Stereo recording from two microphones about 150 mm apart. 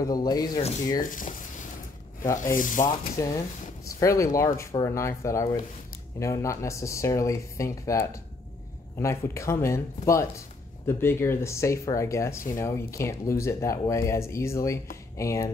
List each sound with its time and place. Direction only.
0.0 s speech: 25° left (ahead or behind)
0.6 s sanding: 45° left (ahead or behind)
1.0 s a sound: 60° left (ahead or behind)
2.5 s speech: 60° left (ahead or behind)
3.2 s speech: 20° left (ahead or behind)